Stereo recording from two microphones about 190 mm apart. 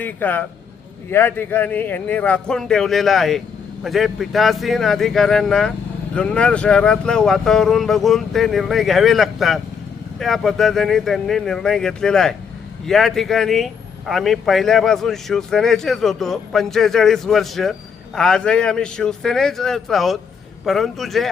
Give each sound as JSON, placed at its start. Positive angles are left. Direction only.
{"t": 0.0, "sound": "a man's voice", "side_deg": 10}